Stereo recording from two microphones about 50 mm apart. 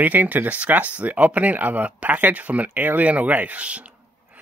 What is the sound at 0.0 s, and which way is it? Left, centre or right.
Speech, right.